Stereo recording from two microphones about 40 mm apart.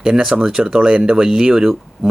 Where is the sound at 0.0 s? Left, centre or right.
Centre.